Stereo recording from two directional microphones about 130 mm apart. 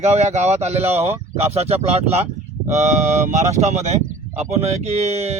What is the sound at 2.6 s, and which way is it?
Speech, 70° right (ahead or behind).